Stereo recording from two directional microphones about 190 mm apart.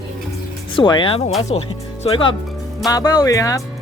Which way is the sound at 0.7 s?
25° left (ahead or behind).